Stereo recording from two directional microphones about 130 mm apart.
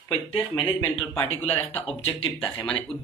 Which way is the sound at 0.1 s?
35° left (ahead or behind).